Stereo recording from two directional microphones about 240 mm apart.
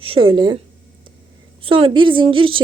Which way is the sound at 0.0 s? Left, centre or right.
Right.